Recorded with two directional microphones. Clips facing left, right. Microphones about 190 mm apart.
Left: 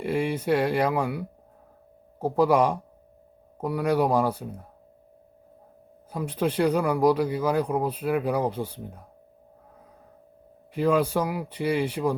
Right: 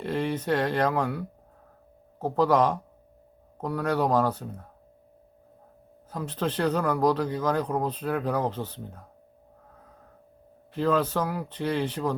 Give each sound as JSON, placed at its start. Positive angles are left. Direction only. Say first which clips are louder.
{"t": 0.0, "sound": "speech", "louder": "left 2 dB", "side_deg": 10}
{"t": 6.1, "sound": "speech", "louder": "left 3 dB", "side_deg": 10}
{"t": 10.8, "sound": "speech", "louder": "left 2 dB", "side_deg": 10}